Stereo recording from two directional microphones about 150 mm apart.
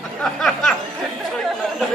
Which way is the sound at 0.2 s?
5° left (ahead or behind).